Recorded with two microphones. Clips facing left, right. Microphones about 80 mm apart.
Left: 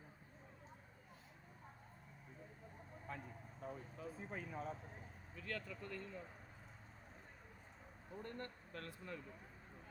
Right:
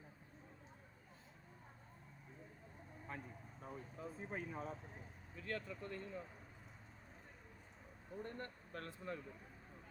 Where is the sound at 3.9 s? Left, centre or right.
Right.